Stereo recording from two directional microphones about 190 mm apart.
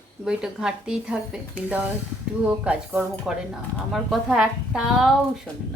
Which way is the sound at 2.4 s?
5° right (ahead or behind).